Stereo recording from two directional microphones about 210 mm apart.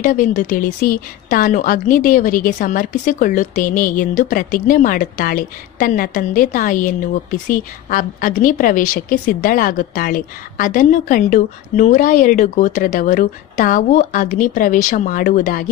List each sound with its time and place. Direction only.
0.0 s a woman's voice: 40° left (ahead or behind)